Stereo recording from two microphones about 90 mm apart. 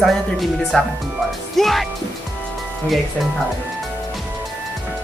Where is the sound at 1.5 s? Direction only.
Centre (ahead or behind).